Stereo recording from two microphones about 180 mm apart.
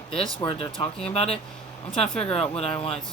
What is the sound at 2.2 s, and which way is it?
Speech, 35° left (ahead or behind).